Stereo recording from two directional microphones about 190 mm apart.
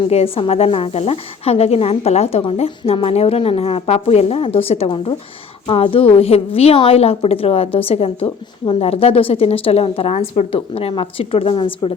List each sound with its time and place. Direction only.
0.1 s a woman's voice: 30° left (ahead or behind)